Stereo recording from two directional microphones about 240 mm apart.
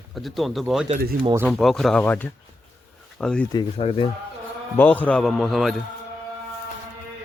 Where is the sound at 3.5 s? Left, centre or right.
Left.